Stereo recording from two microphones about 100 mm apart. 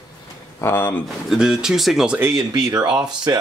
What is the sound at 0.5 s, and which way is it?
Speech, 25° left (ahead or behind).